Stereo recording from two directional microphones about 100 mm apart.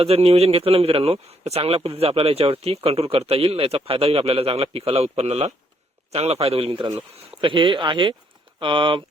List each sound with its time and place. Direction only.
0.0 s speech: 85° right; by 6.8 s 65° right (ahead or behind)
7.4 s speech: 55° right (ahead or behind)